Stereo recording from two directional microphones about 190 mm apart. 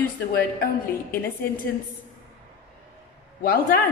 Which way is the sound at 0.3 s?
55° left (ahead or behind).